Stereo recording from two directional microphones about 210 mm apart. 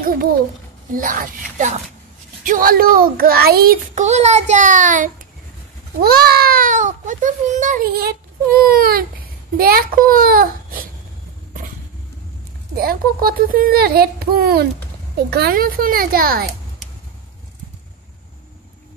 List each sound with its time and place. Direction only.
0.0 s a child's voice: 45° right (ahead or behind)
12.7 s a child's voice: 45° right (ahead or behind)